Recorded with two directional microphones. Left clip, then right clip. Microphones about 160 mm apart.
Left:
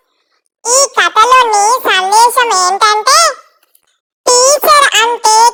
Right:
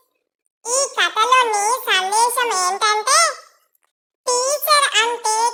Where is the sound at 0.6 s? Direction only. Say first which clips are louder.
Left 9 dB; 50° left (ahead or behind).